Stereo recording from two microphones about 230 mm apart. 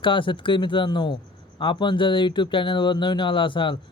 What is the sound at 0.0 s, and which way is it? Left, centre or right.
Speech, left.